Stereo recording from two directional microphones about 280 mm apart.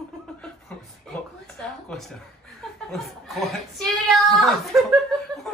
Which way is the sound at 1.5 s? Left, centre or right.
Centre.